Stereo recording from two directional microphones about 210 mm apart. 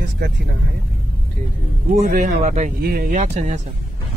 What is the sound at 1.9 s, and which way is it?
Speech, 35° right (ahead or behind).